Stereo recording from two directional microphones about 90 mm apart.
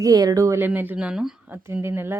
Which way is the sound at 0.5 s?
20° right (ahead or behind).